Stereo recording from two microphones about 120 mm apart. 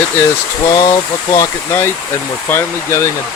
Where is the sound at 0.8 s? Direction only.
35° left (ahead or behind).